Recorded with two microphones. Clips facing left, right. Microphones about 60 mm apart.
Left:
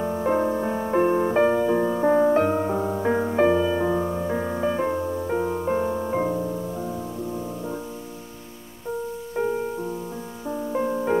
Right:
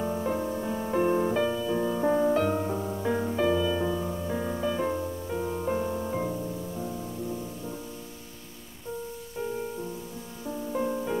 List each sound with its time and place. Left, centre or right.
0.0 s music: left
0.3 s music: left
1.3 s music: left
9.4 s music: left